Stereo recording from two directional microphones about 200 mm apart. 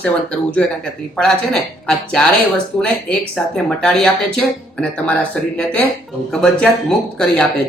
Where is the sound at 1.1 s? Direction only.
Centre (ahead or behind).